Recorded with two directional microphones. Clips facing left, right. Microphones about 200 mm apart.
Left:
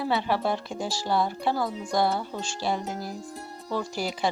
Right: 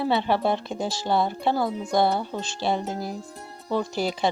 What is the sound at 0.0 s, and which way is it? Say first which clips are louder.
Speech: right 3 dB; 25° right (ahead or behind).